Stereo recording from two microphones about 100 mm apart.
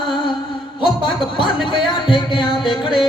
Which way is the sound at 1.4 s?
55° left (ahead or behind).